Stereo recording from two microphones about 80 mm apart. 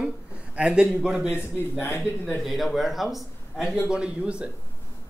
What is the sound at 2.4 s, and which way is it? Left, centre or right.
A man's voice, centre.